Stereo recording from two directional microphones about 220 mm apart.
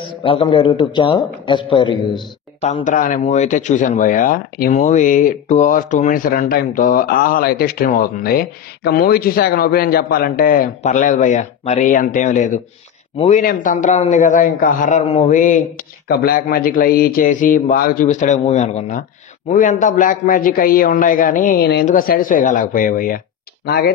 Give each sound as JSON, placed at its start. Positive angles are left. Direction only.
{"t": 0.2, "sound": "a man's voice", "side_deg": 25}
{"t": 2.7, "sound": "speech", "side_deg": 35}